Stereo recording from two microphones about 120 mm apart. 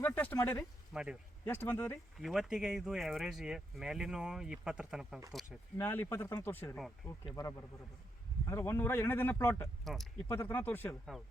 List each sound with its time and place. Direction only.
0.0 s speech: 15° left (ahead or behind)
0.9 s speech: 5° right (ahead or behind)
1.5 s speech: 15° left (ahead or behind)
2.1 s speech: centre (ahead or behind)
5.7 s a man's voice: 20° left (ahead or behind)
6.7 s speech: centre (ahead or behind)
8.4 s a man's voice: 25° left (ahead or behind)
9.8 s speech: centre (ahead or behind)
10.2 s speech: 20° left (ahead or behind)